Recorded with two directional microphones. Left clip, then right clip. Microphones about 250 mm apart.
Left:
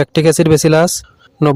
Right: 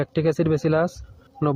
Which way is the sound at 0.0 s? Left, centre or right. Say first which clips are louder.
Left 10 dB; left.